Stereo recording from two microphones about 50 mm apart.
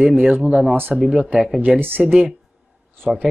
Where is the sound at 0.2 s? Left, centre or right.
Right.